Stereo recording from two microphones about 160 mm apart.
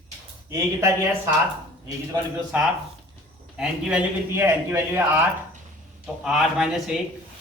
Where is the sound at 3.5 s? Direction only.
10° right (ahead or behind).